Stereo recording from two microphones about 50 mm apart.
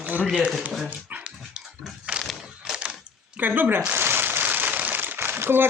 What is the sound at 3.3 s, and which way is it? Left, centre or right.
Speech, right.